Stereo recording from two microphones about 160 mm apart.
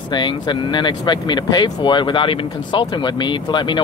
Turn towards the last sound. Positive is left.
turn(degrees=30)  # may be behind; listen again after turning